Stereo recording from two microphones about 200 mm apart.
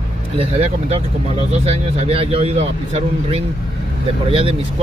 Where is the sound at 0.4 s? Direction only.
30° right (ahead or behind).